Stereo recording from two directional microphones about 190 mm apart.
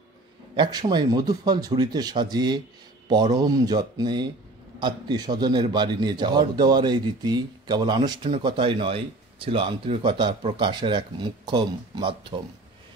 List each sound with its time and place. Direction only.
0.6 s a man's voice: 20° right (ahead or behind)